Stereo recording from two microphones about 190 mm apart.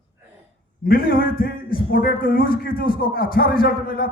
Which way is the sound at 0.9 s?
50° left (ahead or behind).